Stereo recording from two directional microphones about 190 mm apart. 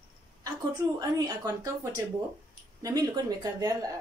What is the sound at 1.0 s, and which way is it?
Speech, 20° right (ahead or behind).